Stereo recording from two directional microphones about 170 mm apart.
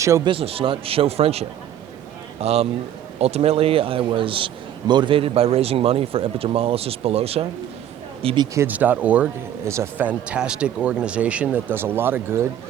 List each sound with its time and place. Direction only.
0.3 s a man's voice: 35° right (ahead or behind)
8.5 s speech: 10° right (ahead or behind)